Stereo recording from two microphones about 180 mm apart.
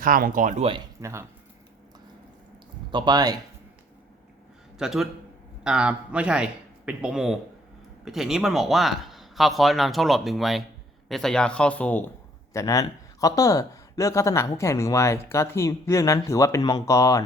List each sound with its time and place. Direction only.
0.0 s speech: 50° right (ahead or behind)
1.0 s speech: 15° right (ahead or behind)
2.9 s speech: 25° right (ahead or behind)
4.8 s speech: centre (ahead or behind); by 17.2 s 15° left (ahead or behind)